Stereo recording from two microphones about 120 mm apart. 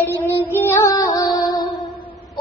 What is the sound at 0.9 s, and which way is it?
Music, 35° left (ahead or behind).